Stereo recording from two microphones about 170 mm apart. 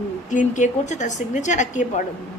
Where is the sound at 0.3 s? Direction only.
45° left (ahead or behind).